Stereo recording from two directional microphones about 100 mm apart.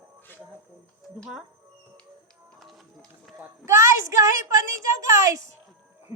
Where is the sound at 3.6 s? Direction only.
30° right (ahead or behind).